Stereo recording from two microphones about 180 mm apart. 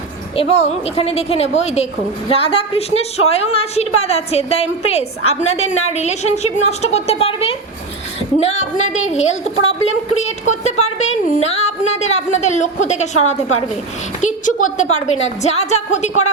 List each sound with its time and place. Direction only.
0.3 s a woman's voice: 35° left (ahead or behind)